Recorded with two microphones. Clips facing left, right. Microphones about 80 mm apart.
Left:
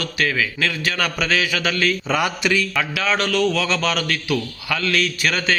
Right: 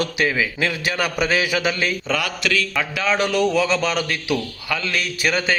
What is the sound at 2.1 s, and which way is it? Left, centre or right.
Mantra, centre.